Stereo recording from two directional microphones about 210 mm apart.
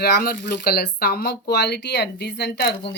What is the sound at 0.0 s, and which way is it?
Speech, 50° left (ahead or behind).